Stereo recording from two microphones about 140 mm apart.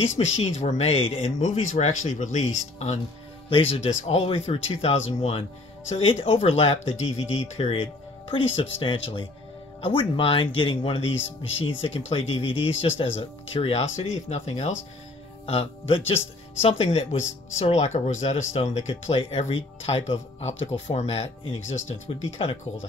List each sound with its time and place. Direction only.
0.1 s speech: 50° left (ahead or behind)
3.4 s speech: 45° left (ahead or behind)